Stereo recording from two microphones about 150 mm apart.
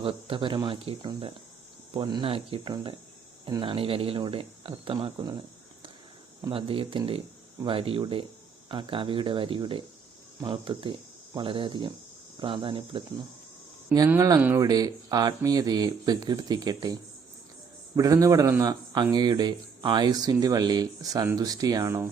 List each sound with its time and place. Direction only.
0.0 s speech: 35° right (ahead or behind)
6.5 s speech: 35° right (ahead or behind)
14.2 s speech: 20° right (ahead or behind)